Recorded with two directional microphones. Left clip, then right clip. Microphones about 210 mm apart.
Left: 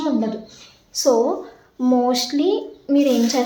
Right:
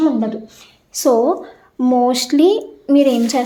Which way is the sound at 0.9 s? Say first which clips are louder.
Right 3 dB; 50° right (ahead or behind).